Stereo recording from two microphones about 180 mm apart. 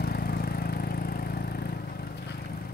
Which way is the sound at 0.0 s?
60° left (ahead or behind).